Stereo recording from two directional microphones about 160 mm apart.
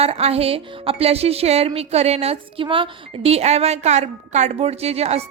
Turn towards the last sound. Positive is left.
turn(degrees=-40)  # may be behind; listen again after turning